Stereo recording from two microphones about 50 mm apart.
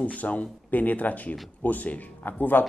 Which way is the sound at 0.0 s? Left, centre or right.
Left.